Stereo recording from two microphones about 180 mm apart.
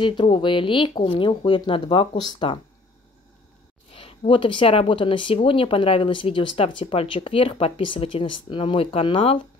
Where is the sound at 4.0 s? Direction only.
30° left (ahead or behind).